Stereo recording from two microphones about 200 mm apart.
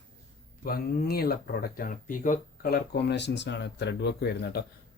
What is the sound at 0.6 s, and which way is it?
Speech, 45° left (ahead or behind).